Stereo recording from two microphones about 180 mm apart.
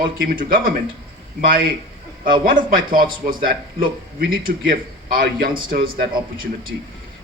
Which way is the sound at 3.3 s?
50° right (ahead or behind).